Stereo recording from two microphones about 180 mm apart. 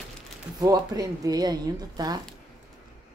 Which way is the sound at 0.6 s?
20° right (ahead or behind).